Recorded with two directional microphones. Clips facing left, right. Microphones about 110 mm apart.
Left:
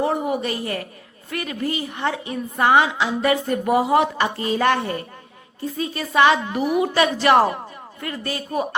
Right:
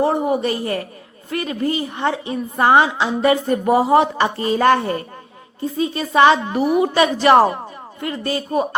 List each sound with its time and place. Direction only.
0.0 s a woman's voice: 35° right (ahead or behind)
5.7 s a woman's voice: 25° right (ahead or behind)
6.9 s a man's voice: 20° right (ahead or behind)